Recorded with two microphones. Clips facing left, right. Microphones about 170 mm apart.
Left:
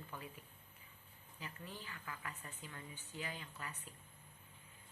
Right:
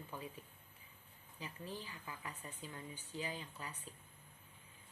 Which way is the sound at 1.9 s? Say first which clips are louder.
Even; 15° right (ahead or behind).